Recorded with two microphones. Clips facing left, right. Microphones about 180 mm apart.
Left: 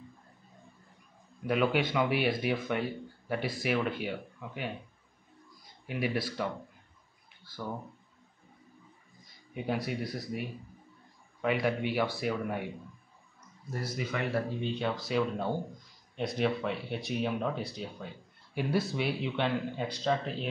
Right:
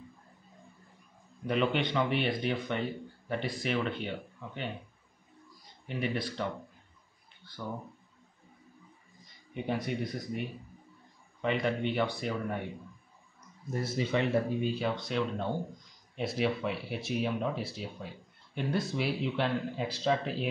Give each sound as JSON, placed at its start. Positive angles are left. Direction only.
{"t": 1.4, "sound": "speech", "side_deg": 5}
{"t": 5.9, "sound": "speech", "side_deg": 5}
{"t": 7.6, "sound": "speech", "side_deg": 5}
{"t": 9.5, "sound": "speech", "side_deg": 5}
{"t": 11.4, "sound": "speech", "side_deg": 5}
{"t": 13.7, "sound": "speech", "side_deg": -25}
{"t": 14.6, "sound": "speech", "side_deg": -5}